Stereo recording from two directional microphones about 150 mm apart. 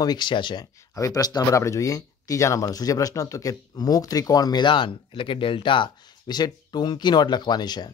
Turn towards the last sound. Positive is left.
turn(degrees=30)  # may be behind; listen again after turning